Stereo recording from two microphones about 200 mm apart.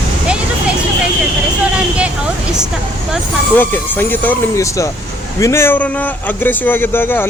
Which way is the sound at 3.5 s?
10° left (ahead or behind).